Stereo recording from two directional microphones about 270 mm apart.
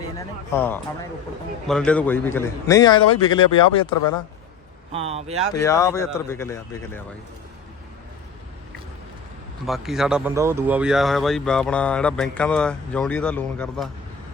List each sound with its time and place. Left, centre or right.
0.5 s a man's voice: centre
4.9 s speech: right
5.5 s a man's voice: centre
9.6 s speech: centre